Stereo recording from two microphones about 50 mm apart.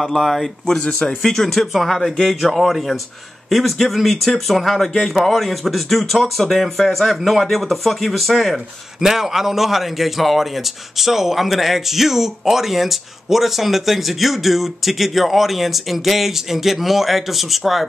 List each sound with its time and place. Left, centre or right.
0.0 s a man's voice: centre
0.8 s speech: centre
1.3 s a man's voice: centre